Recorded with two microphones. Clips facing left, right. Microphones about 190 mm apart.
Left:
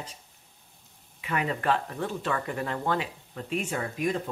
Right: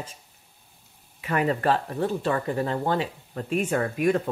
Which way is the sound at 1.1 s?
45° right (ahead or behind).